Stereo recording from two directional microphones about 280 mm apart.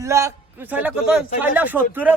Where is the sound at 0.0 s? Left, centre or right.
Centre.